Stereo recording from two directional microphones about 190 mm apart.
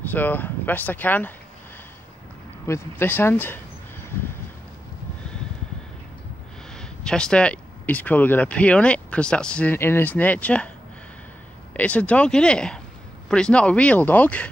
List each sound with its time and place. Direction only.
0.0 s speech: 10° left (ahead or behind)
2.6 s speech: 15° left (ahead or behind)
6.8 s speech: 5° left (ahead or behind)
11.7 s speech: 5° left (ahead or behind)